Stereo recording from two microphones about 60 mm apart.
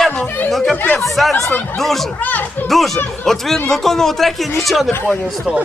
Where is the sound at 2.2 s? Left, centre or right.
Left.